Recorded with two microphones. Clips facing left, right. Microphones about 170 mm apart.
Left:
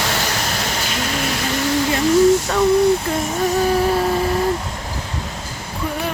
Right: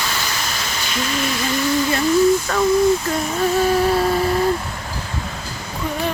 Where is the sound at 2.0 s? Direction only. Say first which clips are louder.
Left 3 dB; 80° left.